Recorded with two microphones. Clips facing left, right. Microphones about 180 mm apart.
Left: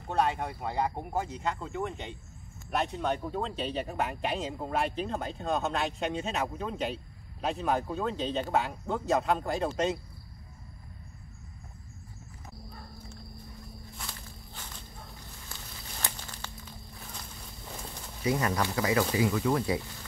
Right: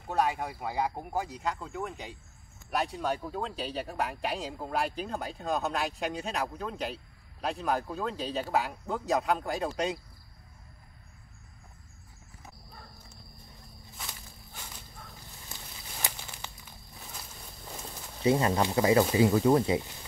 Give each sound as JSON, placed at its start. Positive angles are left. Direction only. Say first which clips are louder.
{"t": 0.1, "sound": "speech", "louder": "even", "side_deg": -5}
{"t": 13.9, "sound": "walk", "louder": "right 2 dB", "side_deg": 0}
{"t": 15.5, "sound": "a sound", "louder": "right 1 dB", "side_deg": -20}
{"t": 16.0, "sound": "crumpling", "louder": "even", "side_deg": -15}
{"t": 18.2, "sound": "speech", "louder": "right 3 dB", "side_deg": -25}